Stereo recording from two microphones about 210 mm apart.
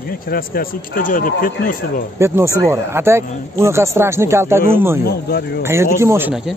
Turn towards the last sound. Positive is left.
turn(degrees=-10)  # may be behind; listen again after turning